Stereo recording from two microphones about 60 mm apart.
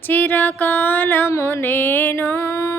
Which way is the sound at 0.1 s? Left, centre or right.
Left.